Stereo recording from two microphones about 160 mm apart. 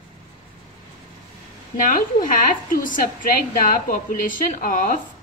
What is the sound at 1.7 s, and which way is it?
A woman's voice, 55° left (ahead or behind).